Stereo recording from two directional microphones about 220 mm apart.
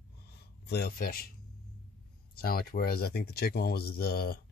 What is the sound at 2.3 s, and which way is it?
Speech, 45° left (ahead or behind).